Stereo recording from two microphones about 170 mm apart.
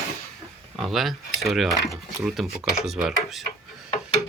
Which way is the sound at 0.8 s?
Centre (ahead or behind).